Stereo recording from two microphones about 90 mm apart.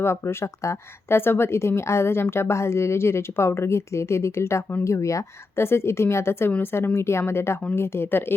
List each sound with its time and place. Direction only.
0.0 s speech: 30° left (ahead or behind)